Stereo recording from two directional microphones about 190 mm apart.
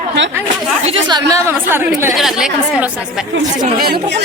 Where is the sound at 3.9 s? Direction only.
60° right (ahead or behind).